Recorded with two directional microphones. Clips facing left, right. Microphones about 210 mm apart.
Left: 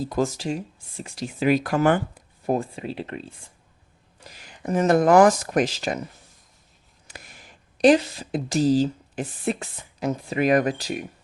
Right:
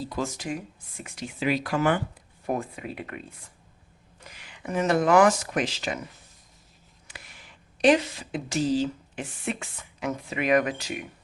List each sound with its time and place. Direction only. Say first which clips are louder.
0.1 s speech: left 6 dB; 40° left (ahead or behind)
2.5 s speech: left 5 dB; 30° left (ahead or behind)
4.3 s speech: left 6 dB; 40° left (ahead or behind)
7.1 s speech: left 3 dB; 40° left (ahead or behind)